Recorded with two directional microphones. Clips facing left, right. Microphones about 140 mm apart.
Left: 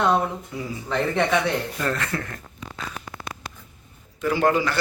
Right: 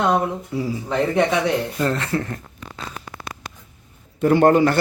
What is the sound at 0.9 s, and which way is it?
Speech, 15° right (ahead or behind).